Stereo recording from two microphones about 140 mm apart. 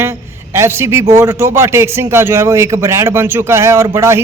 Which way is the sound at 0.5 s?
20° right (ahead or behind).